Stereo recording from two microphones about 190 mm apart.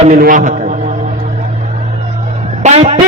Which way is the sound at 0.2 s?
45° right (ahead or behind).